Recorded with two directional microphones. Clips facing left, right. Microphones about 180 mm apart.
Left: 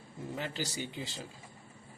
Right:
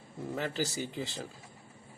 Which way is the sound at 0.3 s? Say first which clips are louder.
Right 4 dB; 50° right (ahead or behind).